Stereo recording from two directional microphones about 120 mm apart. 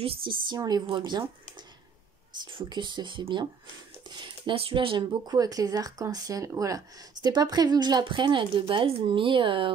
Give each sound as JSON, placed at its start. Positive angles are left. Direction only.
{"t": 0.0, "sound": "speech", "side_deg": -45}
{"t": 0.6, "sound": "speech", "side_deg": -35}
{"t": 2.4, "sound": "speech", "side_deg": -40}